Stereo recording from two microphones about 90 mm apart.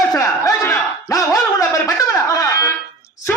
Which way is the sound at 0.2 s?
35° left (ahead or behind).